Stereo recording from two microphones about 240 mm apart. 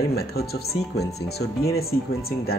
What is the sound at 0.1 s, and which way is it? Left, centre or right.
Speech, left.